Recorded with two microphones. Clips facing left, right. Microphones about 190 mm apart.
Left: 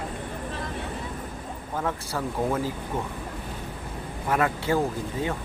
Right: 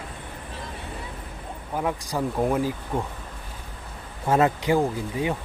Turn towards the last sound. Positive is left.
turn(degrees=-15)  # may be behind; listen again after turning